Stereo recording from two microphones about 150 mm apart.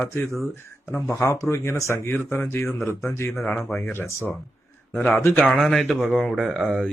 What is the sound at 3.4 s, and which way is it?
Speech, 5° left (ahead or behind).